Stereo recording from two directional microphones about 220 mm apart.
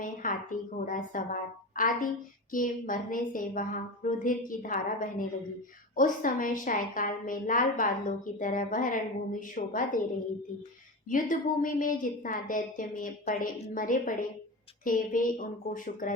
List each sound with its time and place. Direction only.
0.0 s a woman's voice: 40° left (ahead or behind)
11.1 s a woman's voice: 40° left (ahead or behind)